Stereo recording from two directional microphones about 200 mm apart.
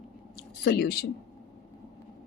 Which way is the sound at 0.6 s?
50° left (ahead or behind).